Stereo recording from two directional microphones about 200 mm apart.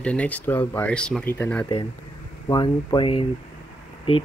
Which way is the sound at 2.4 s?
20° left (ahead or behind).